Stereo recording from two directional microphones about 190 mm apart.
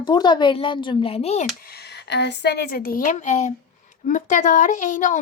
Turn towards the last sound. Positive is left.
turn(degrees=40)  # may be behind; listen again after turning